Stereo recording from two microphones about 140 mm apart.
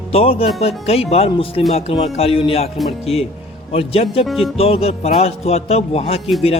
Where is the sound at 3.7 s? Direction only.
45° left (ahead or behind).